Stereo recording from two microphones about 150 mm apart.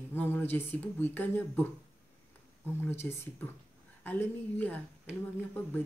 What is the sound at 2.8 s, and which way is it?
A woman's voice, 15° left (ahead or behind).